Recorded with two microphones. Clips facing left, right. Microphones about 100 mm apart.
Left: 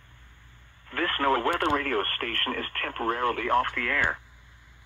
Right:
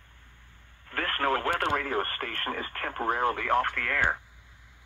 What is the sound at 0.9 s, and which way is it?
Speech, 35° right (ahead or behind).